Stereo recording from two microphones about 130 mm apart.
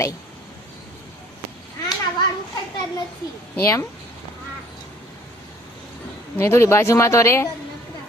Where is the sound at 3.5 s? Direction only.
20° left (ahead or behind).